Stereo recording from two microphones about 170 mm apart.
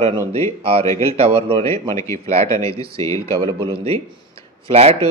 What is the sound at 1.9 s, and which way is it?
Speech, 20° left (ahead or behind).